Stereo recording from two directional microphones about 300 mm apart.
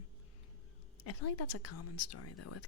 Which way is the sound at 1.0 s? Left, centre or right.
Left.